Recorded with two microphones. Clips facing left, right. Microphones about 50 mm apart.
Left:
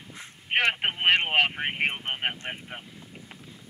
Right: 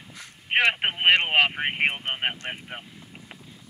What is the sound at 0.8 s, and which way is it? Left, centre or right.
Speech, centre.